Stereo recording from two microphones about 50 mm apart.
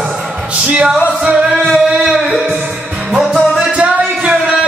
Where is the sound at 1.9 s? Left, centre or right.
Centre.